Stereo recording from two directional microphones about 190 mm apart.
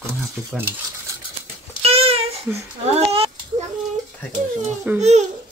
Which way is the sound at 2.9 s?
30° right (ahead or behind).